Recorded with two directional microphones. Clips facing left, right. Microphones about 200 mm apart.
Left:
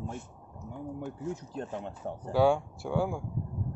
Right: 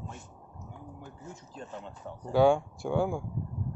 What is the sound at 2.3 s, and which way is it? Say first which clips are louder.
Speech: right 2 dB; 5° left (ahead or behind).